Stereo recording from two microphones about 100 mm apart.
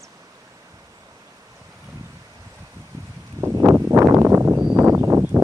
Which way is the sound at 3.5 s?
30° right (ahead or behind).